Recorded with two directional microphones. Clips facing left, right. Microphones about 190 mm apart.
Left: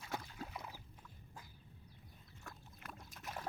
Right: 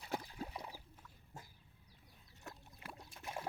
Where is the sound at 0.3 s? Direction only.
15° right (ahead or behind).